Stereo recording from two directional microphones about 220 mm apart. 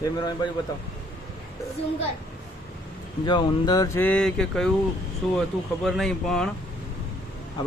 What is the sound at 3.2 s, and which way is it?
Speech, 20° left (ahead or behind).